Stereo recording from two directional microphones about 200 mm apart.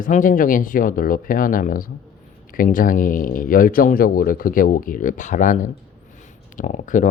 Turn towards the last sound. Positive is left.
turn(degrees=40)  # may be behind; listen again after turning